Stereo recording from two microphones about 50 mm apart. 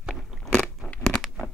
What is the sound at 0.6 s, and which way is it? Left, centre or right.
Crunch, left.